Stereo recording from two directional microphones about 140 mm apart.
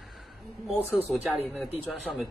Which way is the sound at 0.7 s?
15° right (ahead or behind).